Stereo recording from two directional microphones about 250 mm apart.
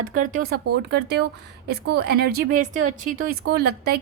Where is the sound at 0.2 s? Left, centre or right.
Right.